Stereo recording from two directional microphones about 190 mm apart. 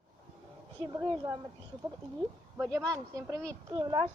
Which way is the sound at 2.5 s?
10° right (ahead or behind).